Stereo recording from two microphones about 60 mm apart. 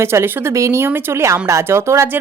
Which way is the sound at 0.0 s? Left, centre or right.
Right.